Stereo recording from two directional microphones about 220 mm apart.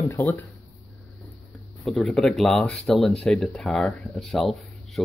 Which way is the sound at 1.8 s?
Centre (ahead or behind).